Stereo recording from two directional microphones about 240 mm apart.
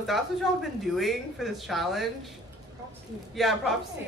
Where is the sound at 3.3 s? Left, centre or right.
Centre.